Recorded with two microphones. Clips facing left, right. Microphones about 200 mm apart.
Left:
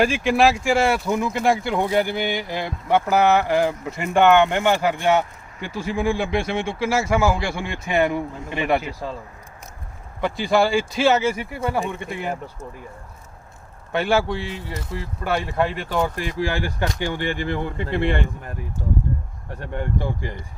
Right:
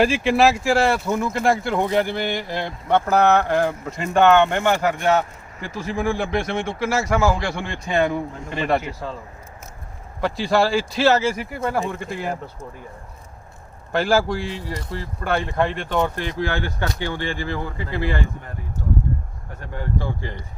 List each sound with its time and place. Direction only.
0.0 s a man's voice: centre (ahead or behind)
10.2 s speech: centre (ahead or behind)
13.9 s speech: centre (ahead or behind); by 17.7 s 20° left (ahead or behind)
17.7 s speech: 60° left (ahead or behind)
19.5 s speech: 25° left (ahead or behind)